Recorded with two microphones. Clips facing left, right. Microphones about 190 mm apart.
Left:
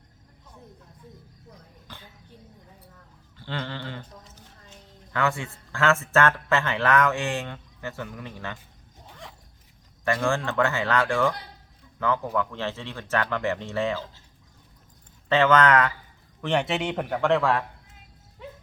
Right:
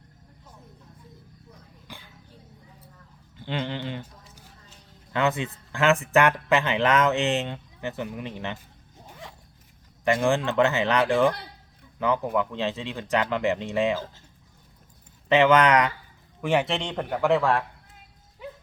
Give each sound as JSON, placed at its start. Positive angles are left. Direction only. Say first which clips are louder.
{"t": 1.9, "sound": "a sound", "louder": "right 2 dB", "side_deg": -10}
{"t": 3.3, "sound": "a sound", "louder": "right 3 dB", "side_deg": -15}
{"t": 5.1, "sound": "speech", "louder": "right 2 dB", "side_deg": -20}
{"t": 9.0, "sound": "zipper", "louder": "right 1 dB", "side_deg": -5}
{"t": 10.0, "sound": "speech", "louder": "right 3 dB", "side_deg": -20}
{"t": 15.3, "sound": "speech", "louder": "right 1 dB", "side_deg": -15}
{"t": 16.4, "sound": "a man's voice", "louder": "right 1 dB", "side_deg": -5}